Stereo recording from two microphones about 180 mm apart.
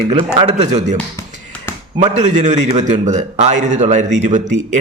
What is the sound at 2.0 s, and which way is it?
A man's voice, 40° right (ahead or behind).